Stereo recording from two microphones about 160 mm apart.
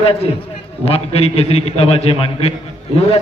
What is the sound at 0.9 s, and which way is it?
A man's voice, 40° left (ahead or behind).